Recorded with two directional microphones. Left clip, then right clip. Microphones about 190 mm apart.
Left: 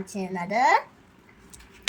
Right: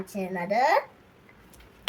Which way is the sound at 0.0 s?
10° right (ahead or behind).